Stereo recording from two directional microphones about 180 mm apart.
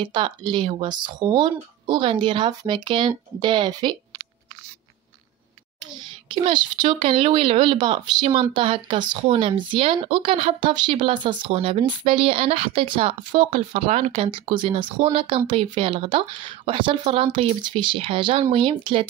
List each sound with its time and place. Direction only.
0.0 s speech: 25° right (ahead or behind)
6.3 s speech: 25° right (ahead or behind)